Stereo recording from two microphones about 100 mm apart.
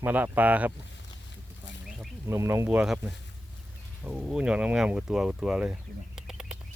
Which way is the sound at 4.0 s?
10° right (ahead or behind).